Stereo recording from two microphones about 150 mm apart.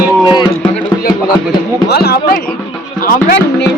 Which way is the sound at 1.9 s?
90° left.